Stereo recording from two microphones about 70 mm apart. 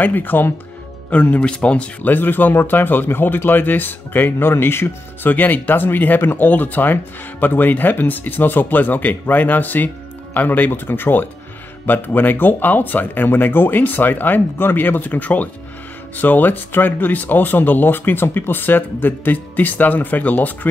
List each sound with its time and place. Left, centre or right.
0.0 s speech: left